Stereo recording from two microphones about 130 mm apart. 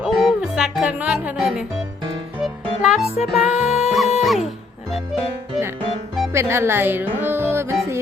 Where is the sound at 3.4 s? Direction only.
5° right (ahead or behind).